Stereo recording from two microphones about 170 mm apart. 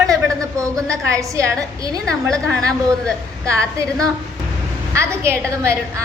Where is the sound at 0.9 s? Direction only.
20° right (ahead or behind).